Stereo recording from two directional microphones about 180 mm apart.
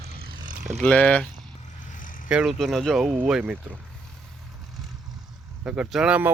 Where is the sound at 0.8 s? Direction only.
5° left (ahead or behind).